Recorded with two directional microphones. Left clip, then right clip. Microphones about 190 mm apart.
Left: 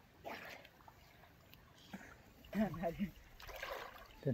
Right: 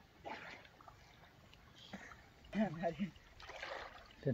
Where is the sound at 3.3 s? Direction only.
30° left (ahead or behind).